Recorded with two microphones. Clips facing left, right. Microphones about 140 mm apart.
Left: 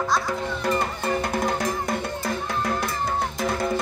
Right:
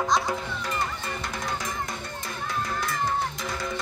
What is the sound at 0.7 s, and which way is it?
Music, 50° left (ahead or behind).